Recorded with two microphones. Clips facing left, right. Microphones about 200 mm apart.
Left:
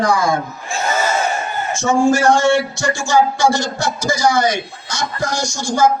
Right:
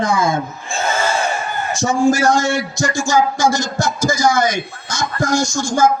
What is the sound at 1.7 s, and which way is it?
A man's voice, 35° right (ahead or behind).